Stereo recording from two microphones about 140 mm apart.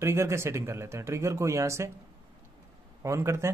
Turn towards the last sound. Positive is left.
turn(degrees=-20)  # may be behind; listen again after turning